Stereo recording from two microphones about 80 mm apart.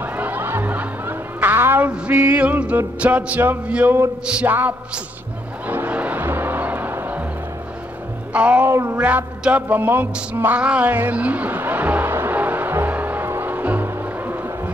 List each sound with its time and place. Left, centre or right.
0.0 s music: right
4.3 s a sound: centre
4.6 s music: right
8.3 s music: centre
8.6 s music: right